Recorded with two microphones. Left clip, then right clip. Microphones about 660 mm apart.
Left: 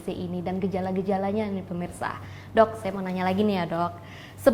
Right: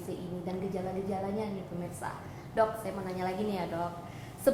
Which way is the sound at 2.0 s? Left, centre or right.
Left.